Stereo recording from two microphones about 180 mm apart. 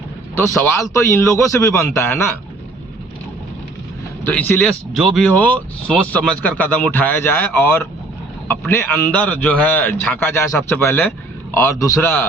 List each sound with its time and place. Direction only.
0.3 s speech: 15° left (ahead or behind)
4.2 s speech: 10° left (ahead or behind)